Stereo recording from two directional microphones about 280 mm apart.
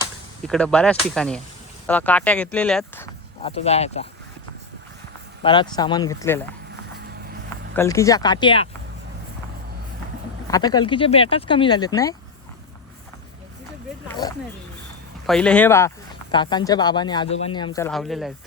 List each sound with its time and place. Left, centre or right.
0.4 s speech: centre
3.4 s speech: left
5.4 s speech: centre
7.8 s speech: centre
10.5 s speech: centre
14.2 s speech: centre
17.9 s speech: centre